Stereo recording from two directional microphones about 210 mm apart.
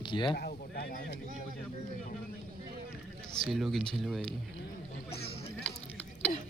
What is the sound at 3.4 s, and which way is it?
Speech, centre (ahead or behind).